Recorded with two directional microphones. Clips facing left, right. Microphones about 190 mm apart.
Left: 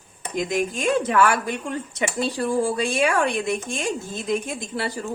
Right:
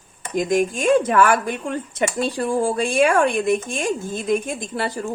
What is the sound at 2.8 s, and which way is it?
Speech, 50° right (ahead or behind).